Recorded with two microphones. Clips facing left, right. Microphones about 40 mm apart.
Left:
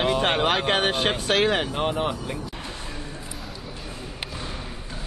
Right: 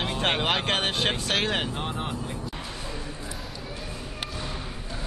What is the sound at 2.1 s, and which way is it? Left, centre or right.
Speech, left.